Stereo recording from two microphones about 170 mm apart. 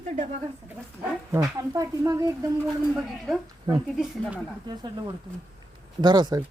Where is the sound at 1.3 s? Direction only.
20° right (ahead or behind).